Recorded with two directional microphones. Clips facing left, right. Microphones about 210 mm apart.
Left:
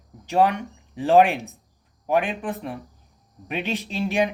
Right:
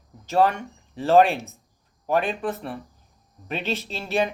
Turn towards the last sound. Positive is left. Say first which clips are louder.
# left 2 dB
turn(degrees=15)  # may be behind; listen again after turning